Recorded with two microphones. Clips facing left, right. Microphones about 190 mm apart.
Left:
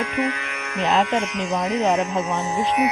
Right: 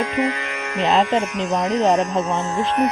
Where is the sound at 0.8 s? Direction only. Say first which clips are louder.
Right 2 dB; 30° right (ahead or behind).